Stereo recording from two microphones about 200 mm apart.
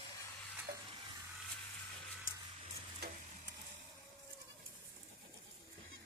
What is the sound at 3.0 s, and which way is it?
Stir, 55° right (ahead or behind).